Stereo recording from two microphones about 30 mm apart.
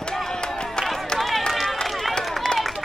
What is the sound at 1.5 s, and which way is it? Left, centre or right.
Run, centre.